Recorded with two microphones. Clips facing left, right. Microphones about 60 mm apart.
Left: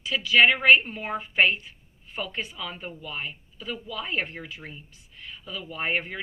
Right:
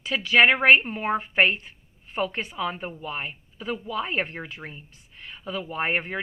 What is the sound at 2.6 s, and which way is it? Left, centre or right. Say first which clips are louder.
Speech: right 6 dB; right.